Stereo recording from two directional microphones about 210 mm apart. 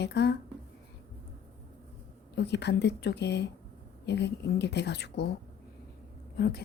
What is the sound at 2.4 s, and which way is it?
Speech, 55° left (ahead or behind).